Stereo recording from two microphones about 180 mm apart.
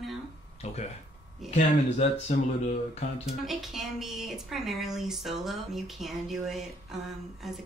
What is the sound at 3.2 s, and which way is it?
A woman's voice, centre (ahead or behind).